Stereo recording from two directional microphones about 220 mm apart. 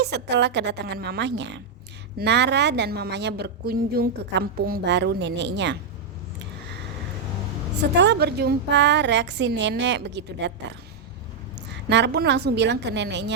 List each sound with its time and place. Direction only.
0.0 s a woman's voice: 50° right (ahead or behind)
7.8 s a woman's voice: 50° right (ahead or behind)
11.9 s a woman's voice: 50° right (ahead or behind)